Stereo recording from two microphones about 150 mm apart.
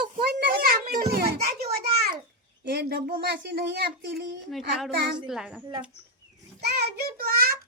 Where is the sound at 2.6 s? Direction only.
90° right.